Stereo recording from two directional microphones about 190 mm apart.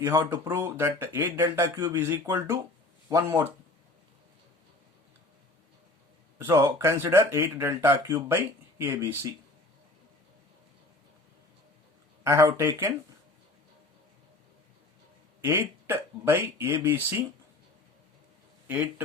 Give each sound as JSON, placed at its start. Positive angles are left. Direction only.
{"t": 0.0, "sound": "speech", "side_deg": -15}
{"t": 6.4, "sound": "speech", "side_deg": -20}
{"t": 12.2, "sound": "speech", "side_deg": -15}
{"t": 15.4, "sound": "speech", "side_deg": -15}
{"t": 18.7, "sound": "speech", "side_deg": -10}